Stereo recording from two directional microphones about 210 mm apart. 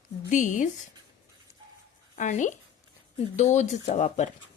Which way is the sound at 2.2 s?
35° left (ahead or behind).